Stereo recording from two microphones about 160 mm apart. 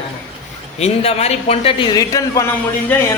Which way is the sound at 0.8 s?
40° left (ahead or behind).